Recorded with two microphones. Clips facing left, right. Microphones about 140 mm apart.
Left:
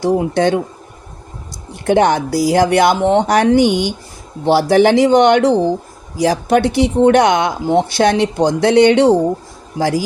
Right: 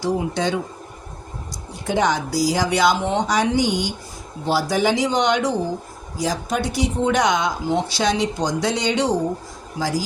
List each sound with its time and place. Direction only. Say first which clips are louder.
0.0 s speech: left 8 dB; 60° left (ahead or behind)
1.7 s speech: left 8 dB; 60° left (ahead or behind)